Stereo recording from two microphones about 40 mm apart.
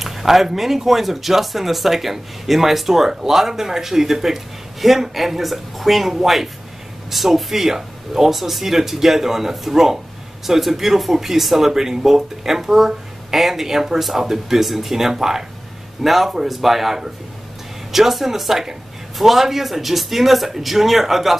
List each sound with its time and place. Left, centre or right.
0.0 s speech: centre